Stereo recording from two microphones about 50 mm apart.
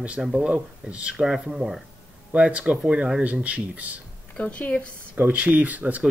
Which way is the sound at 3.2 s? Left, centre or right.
Right.